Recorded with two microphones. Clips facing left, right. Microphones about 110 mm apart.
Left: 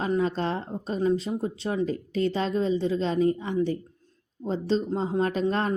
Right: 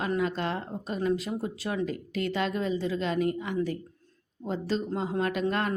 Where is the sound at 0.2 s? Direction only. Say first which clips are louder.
Left 3 dB; 30° left (ahead or behind).